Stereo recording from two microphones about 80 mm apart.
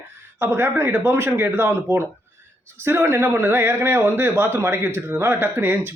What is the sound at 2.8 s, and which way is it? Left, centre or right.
A man's voice, right.